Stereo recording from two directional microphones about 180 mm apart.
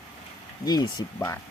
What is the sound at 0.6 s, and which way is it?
Speech, 20° left (ahead or behind).